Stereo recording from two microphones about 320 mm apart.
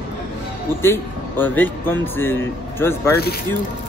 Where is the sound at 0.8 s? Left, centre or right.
Centre.